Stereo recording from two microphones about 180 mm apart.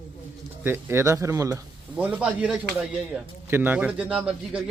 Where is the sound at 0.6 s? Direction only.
15° right (ahead or behind).